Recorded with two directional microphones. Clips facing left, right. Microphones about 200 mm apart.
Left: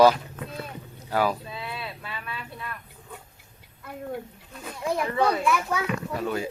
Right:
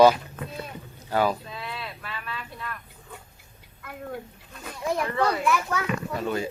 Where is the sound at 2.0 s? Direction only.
15° left (ahead or behind).